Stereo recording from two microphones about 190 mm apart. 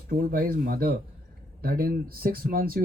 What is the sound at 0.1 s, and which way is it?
Speech, 50° right (ahead or behind).